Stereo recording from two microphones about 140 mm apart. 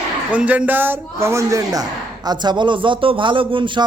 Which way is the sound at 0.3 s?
10° right (ahead or behind).